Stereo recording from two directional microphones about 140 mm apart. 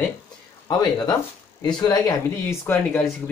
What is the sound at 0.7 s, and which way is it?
Speech, 30° left (ahead or behind).